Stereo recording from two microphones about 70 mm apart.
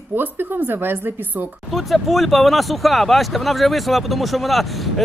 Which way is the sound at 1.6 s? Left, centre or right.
Centre.